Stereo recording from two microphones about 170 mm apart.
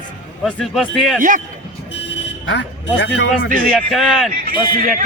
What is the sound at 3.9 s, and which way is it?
Speech, centre (ahead or behind).